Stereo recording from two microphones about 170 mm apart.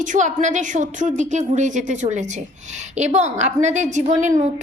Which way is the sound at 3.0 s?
40° right (ahead or behind).